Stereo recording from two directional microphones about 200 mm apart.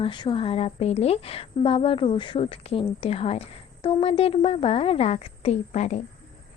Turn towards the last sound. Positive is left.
turn(degrees=35)  # may be behind; listen again after turning